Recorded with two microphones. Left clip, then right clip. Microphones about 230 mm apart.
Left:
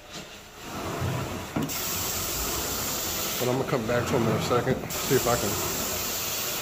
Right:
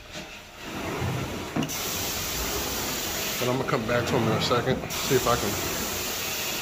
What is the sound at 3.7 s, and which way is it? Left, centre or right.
Speech, centre.